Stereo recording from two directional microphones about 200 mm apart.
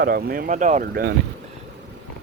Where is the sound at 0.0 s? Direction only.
50° right (ahead or behind).